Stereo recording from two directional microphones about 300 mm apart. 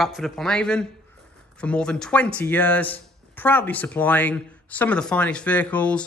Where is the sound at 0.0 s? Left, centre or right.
Centre.